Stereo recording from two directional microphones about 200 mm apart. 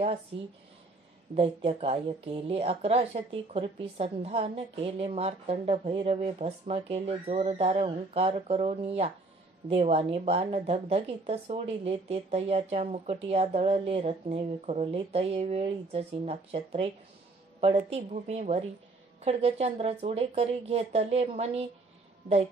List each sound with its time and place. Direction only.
1.3 s a woman's voice: 30° right (ahead or behind)